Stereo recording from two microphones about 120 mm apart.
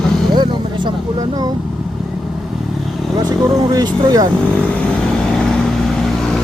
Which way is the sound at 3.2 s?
30° right (ahead or behind).